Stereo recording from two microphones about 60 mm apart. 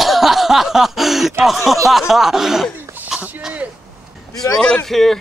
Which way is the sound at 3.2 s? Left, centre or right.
Right.